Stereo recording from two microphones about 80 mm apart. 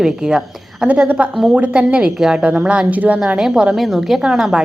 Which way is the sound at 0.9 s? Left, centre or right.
Centre.